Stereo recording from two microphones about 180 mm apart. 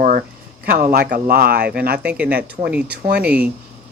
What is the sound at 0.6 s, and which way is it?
Speech, 55° right (ahead or behind).